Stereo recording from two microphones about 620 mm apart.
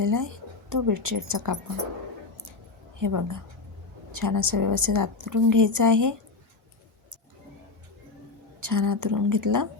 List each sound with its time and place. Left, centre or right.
0.0 s a woman's voice: right
3.0 s a woman's voice: right
8.6 s a woman's voice: right